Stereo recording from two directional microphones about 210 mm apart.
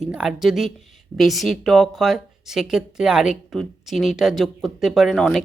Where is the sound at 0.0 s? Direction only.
5° right (ahead or behind).